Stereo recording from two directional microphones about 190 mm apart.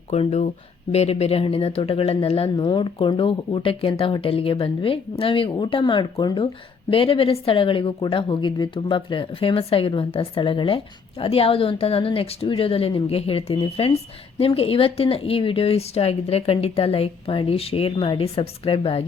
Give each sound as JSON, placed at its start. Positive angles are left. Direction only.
{"t": 0.1, "sound": "speech", "side_deg": 35}